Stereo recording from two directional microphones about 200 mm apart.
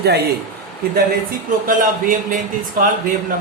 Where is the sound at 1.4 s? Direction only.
45° right (ahead or behind).